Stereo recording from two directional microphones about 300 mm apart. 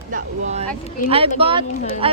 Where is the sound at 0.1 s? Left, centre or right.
Right.